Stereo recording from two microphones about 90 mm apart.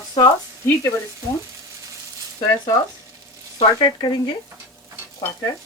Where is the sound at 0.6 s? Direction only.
30° left (ahead or behind).